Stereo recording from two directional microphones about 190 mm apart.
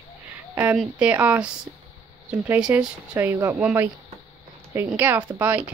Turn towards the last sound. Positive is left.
turn(degrees=-10)  # may be behind; listen again after turning